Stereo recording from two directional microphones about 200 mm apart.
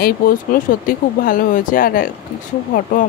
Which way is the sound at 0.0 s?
45° left (ahead or behind).